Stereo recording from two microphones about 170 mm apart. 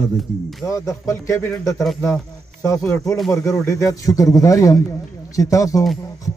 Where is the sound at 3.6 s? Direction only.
20° left (ahead or behind).